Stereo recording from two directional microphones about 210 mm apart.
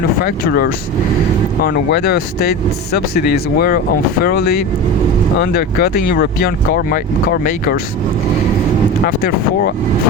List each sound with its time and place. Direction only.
0.2 s speech: 45° left (ahead or behind)
9.0 s speech: 45° left (ahead or behind)